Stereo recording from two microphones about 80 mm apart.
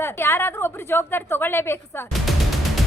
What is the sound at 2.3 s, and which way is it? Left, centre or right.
Music, centre.